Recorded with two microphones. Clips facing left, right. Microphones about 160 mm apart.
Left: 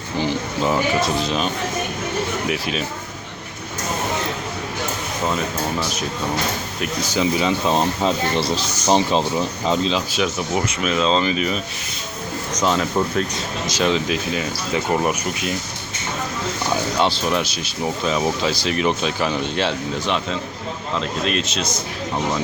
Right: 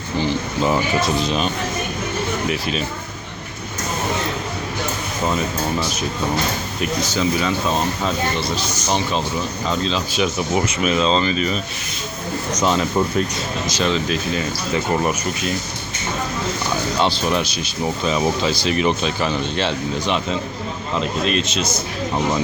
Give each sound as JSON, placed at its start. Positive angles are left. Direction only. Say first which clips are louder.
{"t": 0.6, "sound": "speech", "louder": "even", "side_deg": 0}
{"t": 2.5, "sound": "speech", "louder": "right 1 dB", "side_deg": 5}
{"t": 7.0, "sound": "speech", "louder": "left 2 dB", "side_deg": 15}
{"t": 8.4, "sound": "speech", "louder": "left 2 dB", "side_deg": 30}
{"t": 9.6, "sound": "speech", "louder": "left 2 dB", "side_deg": 20}
{"t": 10.2, "sound": "speech", "louder": "right 2 dB", "side_deg": -5}
{"t": 12.5, "sound": "speech", "louder": "right 1 dB", "side_deg": 0}
{"t": 13.7, "sound": "speech", "louder": "left 1 dB", "side_deg": 10}
{"t": 17.0, "sound": "a man's voice", "louder": "right 2 dB", "side_deg": 0}